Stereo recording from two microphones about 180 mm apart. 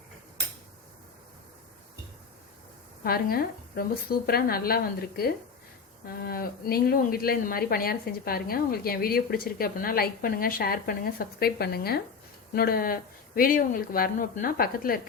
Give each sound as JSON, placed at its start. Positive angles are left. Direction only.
{"t": 3.0, "sound": "speech", "side_deg": 55}